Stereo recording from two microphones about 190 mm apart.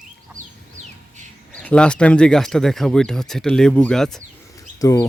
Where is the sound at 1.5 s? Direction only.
5° left (ahead or behind).